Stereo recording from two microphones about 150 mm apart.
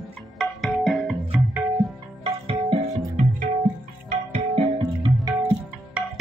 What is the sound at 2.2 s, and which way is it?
Music, 40° right (ahead or behind).